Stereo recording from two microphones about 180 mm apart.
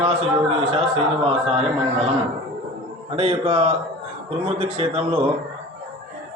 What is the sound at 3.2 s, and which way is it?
A man's voice, 30° right (ahead or behind).